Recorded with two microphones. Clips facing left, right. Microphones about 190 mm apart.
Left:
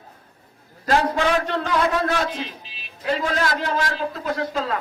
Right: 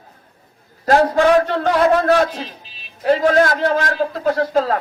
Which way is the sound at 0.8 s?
50° right (ahead or behind).